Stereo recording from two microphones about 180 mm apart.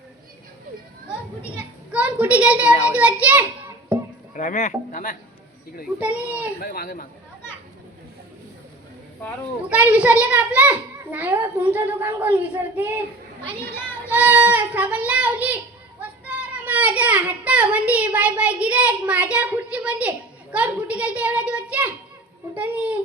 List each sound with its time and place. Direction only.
1.9 s a child's voice: 5° right (ahead or behind)
4.4 s speech: 45° left (ahead or behind)
6.0 s a child's voice: 5° right (ahead or behind)
6.6 s speech: 55° left (ahead or behind)
9.6 s a child's voice: 10° right (ahead or behind)
14.1 s a child's voice: 10° right (ahead or behind)